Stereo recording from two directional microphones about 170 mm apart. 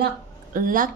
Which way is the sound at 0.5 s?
55° right (ahead or behind).